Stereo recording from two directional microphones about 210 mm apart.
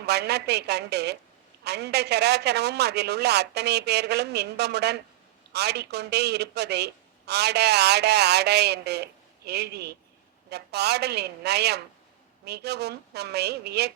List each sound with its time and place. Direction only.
0.0 s a man's voice: 50° right (ahead or behind)